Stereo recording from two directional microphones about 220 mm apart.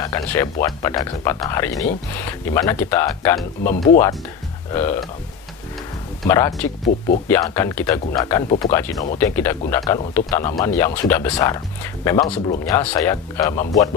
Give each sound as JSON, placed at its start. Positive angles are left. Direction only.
{"t": 0.0, "sound": "speech", "side_deg": 15}
{"t": 3.6, "sound": "speech", "side_deg": 40}
{"t": 4.7, "sound": "speech", "side_deg": 10}
{"t": 6.2, "sound": "speech", "side_deg": 15}